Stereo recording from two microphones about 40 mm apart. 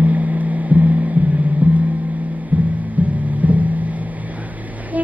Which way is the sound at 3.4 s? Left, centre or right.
Right.